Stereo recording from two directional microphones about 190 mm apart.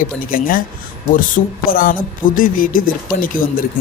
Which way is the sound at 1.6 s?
50° left (ahead or behind).